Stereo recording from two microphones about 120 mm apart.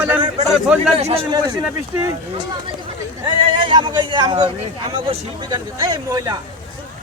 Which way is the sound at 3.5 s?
40° right (ahead or behind).